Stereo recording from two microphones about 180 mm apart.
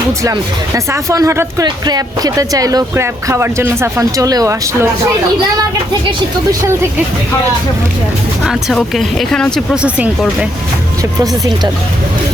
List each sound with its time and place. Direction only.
1.1 s speech: 15° right (ahead or behind)
6.1 s speech: 20° right (ahead or behind)
8.4 s speech: centre (ahead or behind)
11.2 s speech: 20° right (ahead or behind)